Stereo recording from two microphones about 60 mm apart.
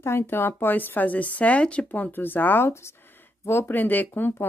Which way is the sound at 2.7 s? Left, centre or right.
Left.